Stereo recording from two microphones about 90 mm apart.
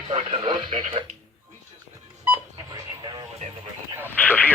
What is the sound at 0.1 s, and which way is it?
Speech, 90° right.